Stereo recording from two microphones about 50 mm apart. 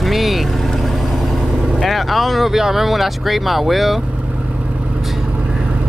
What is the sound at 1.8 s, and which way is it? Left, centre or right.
Speech, centre.